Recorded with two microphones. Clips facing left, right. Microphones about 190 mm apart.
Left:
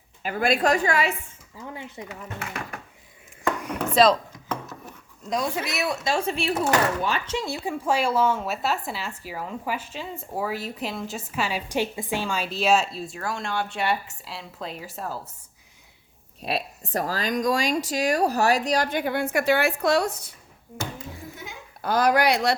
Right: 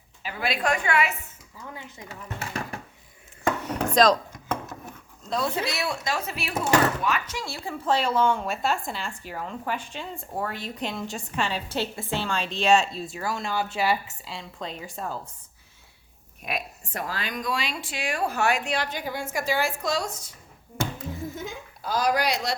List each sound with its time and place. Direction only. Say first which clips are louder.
0.2 s a woman's voice: left 6 dB; 50° left (ahead or behind); by 2.1 s 30° left (ahead or behind)
2.4 s a sound: right 3 dB; 30° right (ahead or behind)
3.6 s chopping: left 2 dB; 5° left (ahead or behind)
4.1 s a sound: right 1 dB; 50° right (ahead or behind)
5.3 s a woman's voice: even; 20° left (ahead or behind)
16.4 s speech: left 4 dB; 35° left (ahead or behind); by 20.3 s 60° left (ahead or behind)
21.8 s speech: left 4 dB; 60° left (ahead or behind)